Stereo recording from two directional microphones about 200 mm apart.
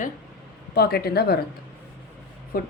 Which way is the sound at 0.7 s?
50° left (ahead or behind).